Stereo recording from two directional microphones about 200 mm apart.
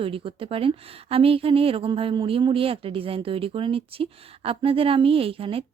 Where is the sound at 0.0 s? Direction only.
25° right (ahead or behind).